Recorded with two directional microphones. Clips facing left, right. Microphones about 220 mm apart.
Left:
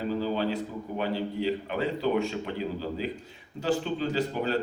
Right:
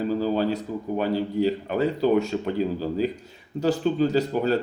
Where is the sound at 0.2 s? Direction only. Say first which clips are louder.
Right 5 dB; 40° right (ahead or behind).